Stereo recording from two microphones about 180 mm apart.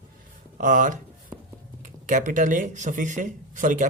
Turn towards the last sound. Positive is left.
turn(degrees=-45)  # may be behind; listen again after turning